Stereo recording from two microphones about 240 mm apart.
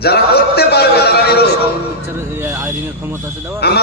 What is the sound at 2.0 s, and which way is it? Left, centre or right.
Speech, centre.